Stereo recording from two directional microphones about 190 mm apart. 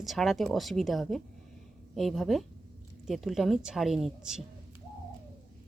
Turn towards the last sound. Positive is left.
turn(degrees=0)  # may be behind; listen again after turning